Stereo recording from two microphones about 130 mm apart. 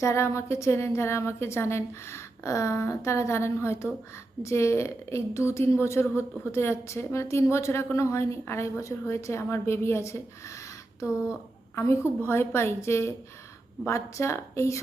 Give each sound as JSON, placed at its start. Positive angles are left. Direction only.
{"t": 0.0, "sound": "a woman's voice", "side_deg": 20}
{"t": 11.7, "sound": "a woman's voice", "side_deg": 20}